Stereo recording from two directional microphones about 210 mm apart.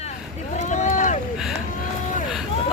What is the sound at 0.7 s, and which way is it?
Boat, 35° left (ahead or behind).